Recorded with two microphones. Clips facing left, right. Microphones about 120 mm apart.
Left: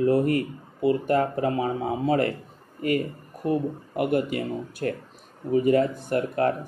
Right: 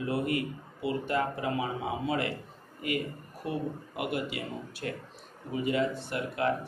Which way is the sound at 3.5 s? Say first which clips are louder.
Left 8 dB; 40° left (ahead or behind).